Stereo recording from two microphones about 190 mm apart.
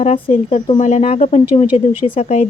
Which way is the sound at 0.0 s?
35° left (ahead or behind).